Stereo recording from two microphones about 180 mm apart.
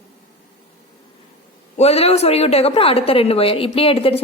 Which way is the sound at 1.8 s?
35° left (ahead or behind).